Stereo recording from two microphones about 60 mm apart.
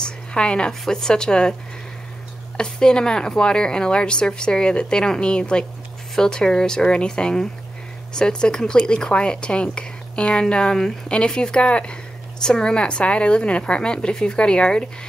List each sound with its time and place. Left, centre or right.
0.0 s speech: centre
2.5 s speech: centre